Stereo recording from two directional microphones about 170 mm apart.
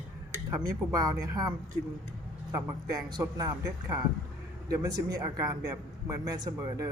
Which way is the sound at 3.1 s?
25° right (ahead or behind).